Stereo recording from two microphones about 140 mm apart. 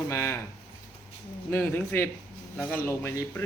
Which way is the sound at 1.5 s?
15° left (ahead or behind).